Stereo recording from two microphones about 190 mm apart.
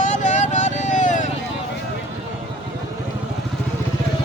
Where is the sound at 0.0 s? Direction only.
40° left (ahead or behind).